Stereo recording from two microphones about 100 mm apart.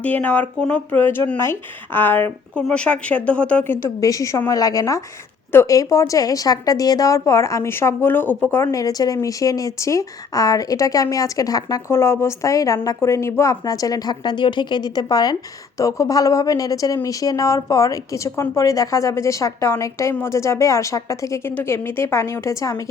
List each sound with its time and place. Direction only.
0.0 s a woman's voice: 15° left (ahead or behind)
2.6 s speech: 10° left (ahead or behind)
4.0 s speech: 35° left (ahead or behind)
5.5 s speech: 25° left (ahead or behind)
5.7 s speech: 35° left (ahead or behind)
8.7 s speech: 35° left (ahead or behind)
11.9 s a woman's voice: 25° left (ahead or behind)